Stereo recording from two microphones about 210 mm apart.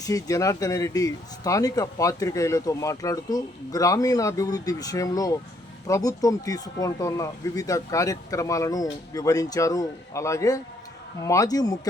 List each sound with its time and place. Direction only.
0.0 s speech: 15° left (ahead or behind)